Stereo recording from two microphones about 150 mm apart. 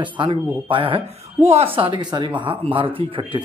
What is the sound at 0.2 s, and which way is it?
Speech, 35° right (ahead or behind).